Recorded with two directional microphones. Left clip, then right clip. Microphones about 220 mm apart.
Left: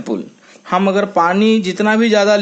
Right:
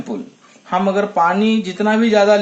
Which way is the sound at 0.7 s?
45° left (ahead or behind).